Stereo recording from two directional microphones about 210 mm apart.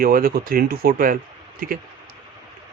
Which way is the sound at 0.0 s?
45° right (ahead or behind).